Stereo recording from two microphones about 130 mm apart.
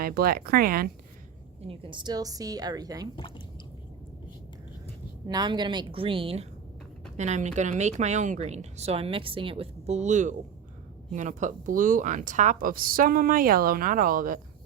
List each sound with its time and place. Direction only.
1.6 s a woman's voice: 45° right (ahead or behind); by 3.1 s 30° right (ahead or behind)
3.2 s speech: 40° left (ahead or behind)
5.3 s a woman's voice: 35° right (ahead or behind); by 6.5 s 50° right (ahead or behind)
7.2 s a woman's voice: 65° right (ahead or behind); by 14.3 s 90° right